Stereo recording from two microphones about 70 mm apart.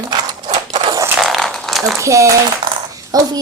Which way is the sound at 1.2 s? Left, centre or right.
Centre.